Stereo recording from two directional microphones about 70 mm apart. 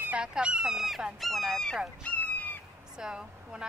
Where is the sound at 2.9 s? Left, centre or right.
Centre.